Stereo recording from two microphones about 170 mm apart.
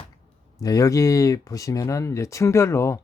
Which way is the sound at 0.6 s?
20° left (ahead or behind).